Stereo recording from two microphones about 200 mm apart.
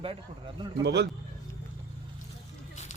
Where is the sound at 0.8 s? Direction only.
60° right (ahead or behind).